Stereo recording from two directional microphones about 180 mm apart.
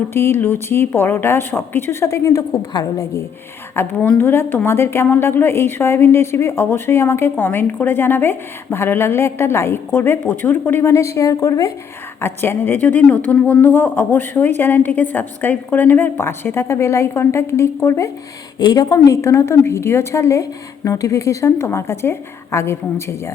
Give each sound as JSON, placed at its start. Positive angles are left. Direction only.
{"t": 0.3, "sound": "a woman's voice", "side_deg": 10}